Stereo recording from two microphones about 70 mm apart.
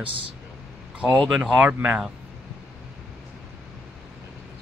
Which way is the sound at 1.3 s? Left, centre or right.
Centre.